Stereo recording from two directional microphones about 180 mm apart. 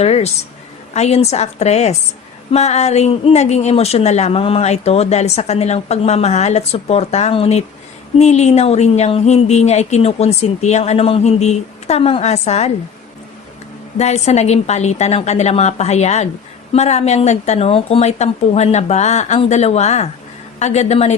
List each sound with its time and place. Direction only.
0.0 s speech: 35° left (ahead or behind)
14.0 s speech: 40° left (ahead or behind)